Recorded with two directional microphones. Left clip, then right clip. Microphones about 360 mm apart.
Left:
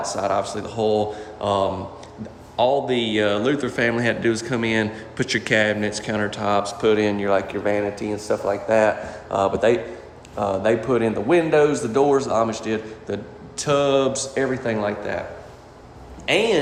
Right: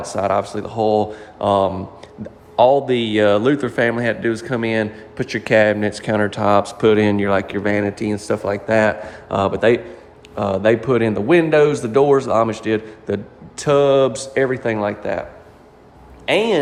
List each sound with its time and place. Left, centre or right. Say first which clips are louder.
0.0 s speech: right 3 dB; centre
2.8 s a man's voice: right 5 dB; centre
16.2 s speech: right 2 dB; centre